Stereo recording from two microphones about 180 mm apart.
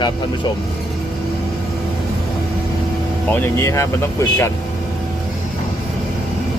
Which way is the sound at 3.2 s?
15° left (ahead or behind).